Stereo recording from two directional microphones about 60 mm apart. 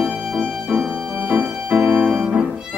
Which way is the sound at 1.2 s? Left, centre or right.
Right.